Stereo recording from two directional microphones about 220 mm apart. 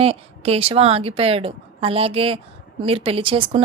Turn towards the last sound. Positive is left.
turn(degrees=-25)  # may be behind; listen again after turning